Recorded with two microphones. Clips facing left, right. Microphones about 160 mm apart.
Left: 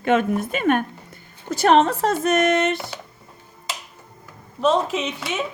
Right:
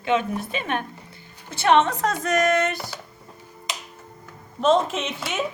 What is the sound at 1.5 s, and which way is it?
Speech, 40° left (ahead or behind).